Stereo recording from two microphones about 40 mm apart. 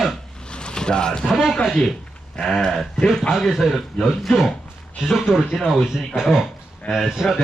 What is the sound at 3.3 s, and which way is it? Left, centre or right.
A man's voice, centre.